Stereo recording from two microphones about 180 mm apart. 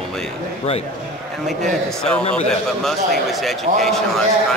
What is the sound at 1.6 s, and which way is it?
A man's voice, 5° left (ahead or behind).